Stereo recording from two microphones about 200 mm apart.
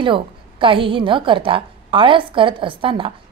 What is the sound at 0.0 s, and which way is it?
A woman's voice, 25° right (ahead or behind).